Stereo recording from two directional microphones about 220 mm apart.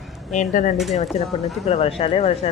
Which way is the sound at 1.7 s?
25° left (ahead or behind).